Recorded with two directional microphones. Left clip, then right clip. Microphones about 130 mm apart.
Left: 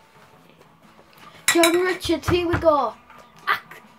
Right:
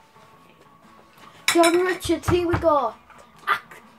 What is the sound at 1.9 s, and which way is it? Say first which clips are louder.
A child's voice: left 1 dB; 25° left (ahead or behind).